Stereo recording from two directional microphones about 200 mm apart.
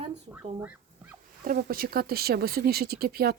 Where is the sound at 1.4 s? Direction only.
45° right (ahead or behind).